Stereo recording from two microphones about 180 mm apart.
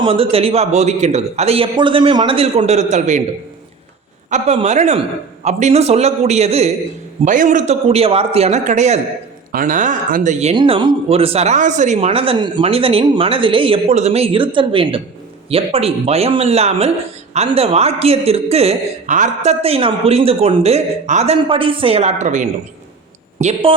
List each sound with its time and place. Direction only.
0.0 s a man's voice: 30° right (ahead or behind)
4.3 s a man's voice: 40° right (ahead or behind)
9.5 s speech: 50° right (ahead or behind)
10.5 s a man's voice: 25° right (ahead or behind)